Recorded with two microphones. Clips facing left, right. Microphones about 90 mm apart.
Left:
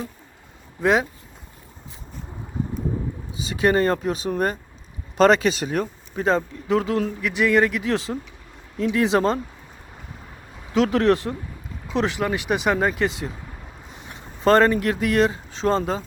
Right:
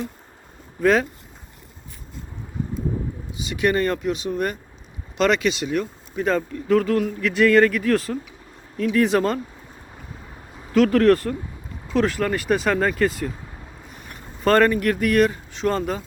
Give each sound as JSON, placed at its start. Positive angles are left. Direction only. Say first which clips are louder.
{"t": 0.8, "sound": "speech", "louder": "right 1 dB", "side_deg": 20}
{"t": 3.4, "sound": "speech", "louder": "left 2 dB", "side_deg": 35}
{"t": 7.2, "sound": "speech", "louder": "right 4 dB", "side_deg": 15}
{"t": 10.7, "sound": "speech", "louder": "right 3 dB", "side_deg": 25}